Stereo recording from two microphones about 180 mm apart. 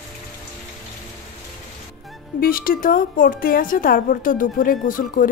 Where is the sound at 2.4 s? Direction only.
55° left (ahead or behind).